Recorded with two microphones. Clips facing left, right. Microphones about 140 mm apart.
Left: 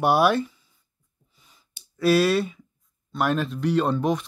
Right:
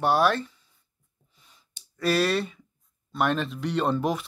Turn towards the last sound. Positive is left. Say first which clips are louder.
# left 3 dB
turn(degrees=0)  # may be behind; listen again after turning